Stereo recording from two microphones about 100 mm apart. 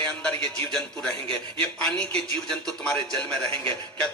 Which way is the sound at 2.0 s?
10° left (ahead or behind).